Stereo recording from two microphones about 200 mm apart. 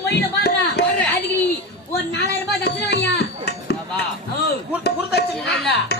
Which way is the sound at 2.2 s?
55° left (ahead or behind).